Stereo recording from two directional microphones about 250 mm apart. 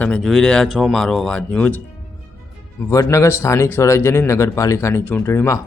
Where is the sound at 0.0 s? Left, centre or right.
Centre.